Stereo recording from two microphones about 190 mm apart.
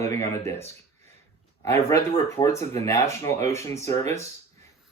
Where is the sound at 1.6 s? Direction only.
15° left (ahead or behind).